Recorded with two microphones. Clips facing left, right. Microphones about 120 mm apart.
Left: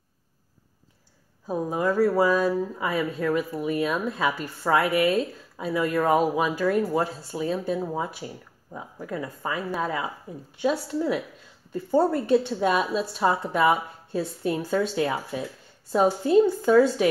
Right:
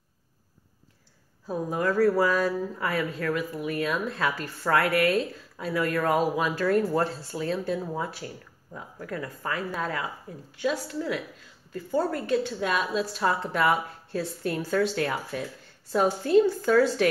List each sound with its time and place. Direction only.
1.5 s a woman's voice: 15° left (ahead or behind)